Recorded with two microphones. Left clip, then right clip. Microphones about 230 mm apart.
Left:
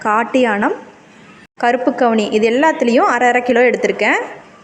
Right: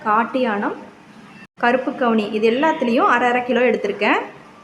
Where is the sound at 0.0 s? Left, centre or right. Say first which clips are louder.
Left 4 dB; left.